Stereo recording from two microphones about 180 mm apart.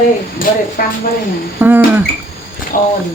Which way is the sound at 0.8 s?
55° left (ahead or behind).